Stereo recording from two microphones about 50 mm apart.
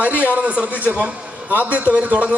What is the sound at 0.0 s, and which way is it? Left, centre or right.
A man's voice, right.